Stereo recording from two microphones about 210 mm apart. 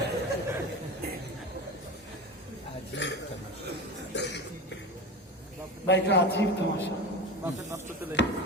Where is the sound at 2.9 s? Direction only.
60° left (ahead or behind).